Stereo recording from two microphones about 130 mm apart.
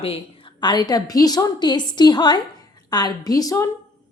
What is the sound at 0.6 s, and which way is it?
A woman's voice, 35° left (ahead or behind).